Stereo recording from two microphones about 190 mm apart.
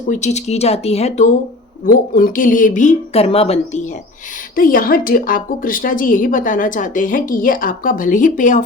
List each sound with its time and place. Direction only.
0.1 s speech: 35° left (ahead or behind)
4.5 s speech: 45° left (ahead or behind)